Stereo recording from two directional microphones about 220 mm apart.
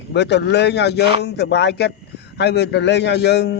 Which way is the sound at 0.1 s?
50° left (ahead or behind).